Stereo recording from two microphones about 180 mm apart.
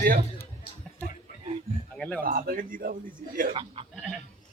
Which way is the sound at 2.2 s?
55° right (ahead or behind).